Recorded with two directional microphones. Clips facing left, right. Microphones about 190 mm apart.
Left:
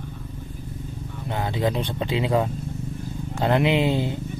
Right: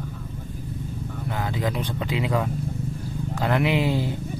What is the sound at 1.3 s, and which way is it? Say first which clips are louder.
Speech: left 3 dB; 25° left (ahead or behind).